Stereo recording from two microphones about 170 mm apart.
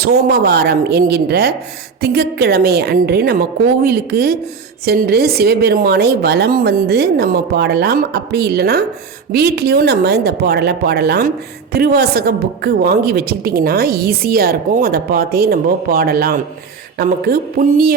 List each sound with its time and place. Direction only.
0.0 s a woman's voice: 70° right (ahead or behind)